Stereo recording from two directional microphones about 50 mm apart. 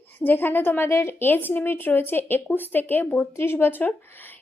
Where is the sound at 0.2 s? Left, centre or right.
Left.